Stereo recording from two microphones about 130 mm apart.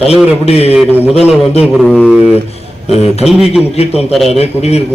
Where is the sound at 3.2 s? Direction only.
5° right (ahead or behind).